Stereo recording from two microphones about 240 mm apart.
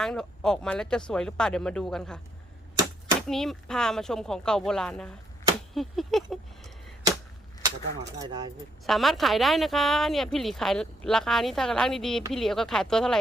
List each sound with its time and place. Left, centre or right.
0.0 s a woman's voice: centre
5.7 s a sound: centre
8.2 s speech: centre
8.9 s a woman's voice: centre